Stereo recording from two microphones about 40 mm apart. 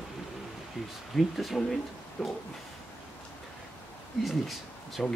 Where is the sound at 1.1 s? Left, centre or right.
Centre.